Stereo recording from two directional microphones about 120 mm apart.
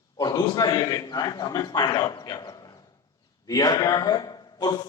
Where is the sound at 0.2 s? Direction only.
35° left (ahead or behind).